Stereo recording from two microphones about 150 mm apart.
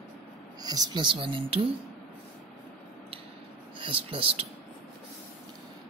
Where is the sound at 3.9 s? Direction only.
35° right (ahead or behind).